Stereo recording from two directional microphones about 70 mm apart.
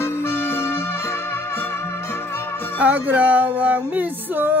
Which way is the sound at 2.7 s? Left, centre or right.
Right.